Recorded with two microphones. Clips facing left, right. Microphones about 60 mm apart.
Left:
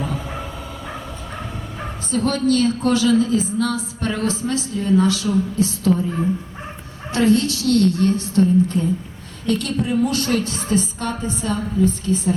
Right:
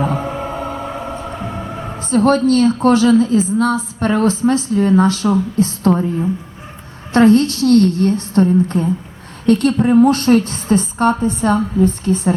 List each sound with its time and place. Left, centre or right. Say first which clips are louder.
0.0 s music: right 7 dB; right
2.0 s a woman's voice: right 6 dB; right
7.1 s a woman's voice: right 6 dB; right